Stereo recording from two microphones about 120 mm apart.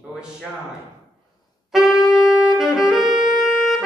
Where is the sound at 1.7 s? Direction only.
5° right (ahead or behind).